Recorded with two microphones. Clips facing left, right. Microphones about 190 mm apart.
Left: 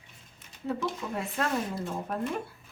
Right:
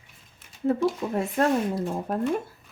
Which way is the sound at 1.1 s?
40° right (ahead or behind).